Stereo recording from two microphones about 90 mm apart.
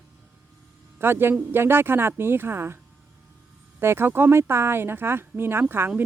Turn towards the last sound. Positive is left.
turn(degrees=-25)  # may be behind; listen again after turning